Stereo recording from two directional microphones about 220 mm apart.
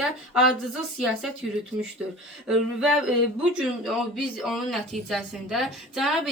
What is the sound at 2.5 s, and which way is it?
A woman's voice, centre (ahead or behind).